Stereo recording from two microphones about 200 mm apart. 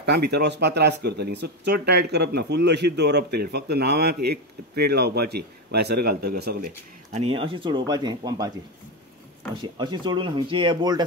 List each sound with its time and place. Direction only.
0.0 s speech: 55° right (ahead or behind)
7.1 s speech: 30° right (ahead or behind)
9.6 s speech: 25° right (ahead or behind)